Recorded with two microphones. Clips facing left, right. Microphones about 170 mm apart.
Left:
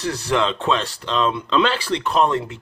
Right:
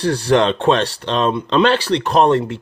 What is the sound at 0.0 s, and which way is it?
Speech, 65° right (ahead or behind).